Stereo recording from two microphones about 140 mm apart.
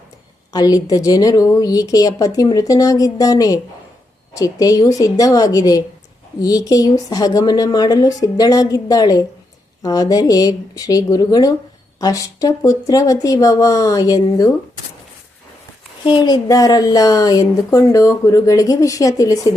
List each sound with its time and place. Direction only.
0.5 s speech: 30° left (ahead or behind)
16.0 s speech: 30° left (ahead or behind)